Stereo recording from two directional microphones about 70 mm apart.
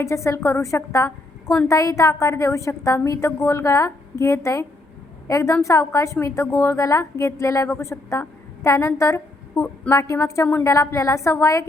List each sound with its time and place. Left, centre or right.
0.0 s a woman's voice: left